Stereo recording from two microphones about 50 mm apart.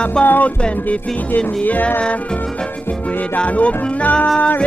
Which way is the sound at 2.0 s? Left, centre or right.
Left.